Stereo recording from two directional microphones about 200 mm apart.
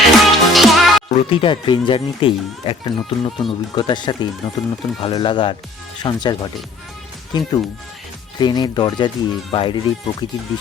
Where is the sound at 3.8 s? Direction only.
20° left (ahead or behind).